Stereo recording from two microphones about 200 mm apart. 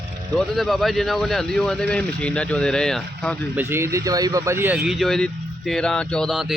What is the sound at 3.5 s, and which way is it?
Speech, 10° right (ahead or behind).